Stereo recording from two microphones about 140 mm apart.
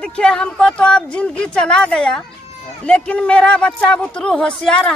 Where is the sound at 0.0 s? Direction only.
5° left (ahead or behind).